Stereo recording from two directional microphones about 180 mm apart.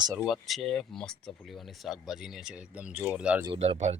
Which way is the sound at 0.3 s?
Centre (ahead or behind).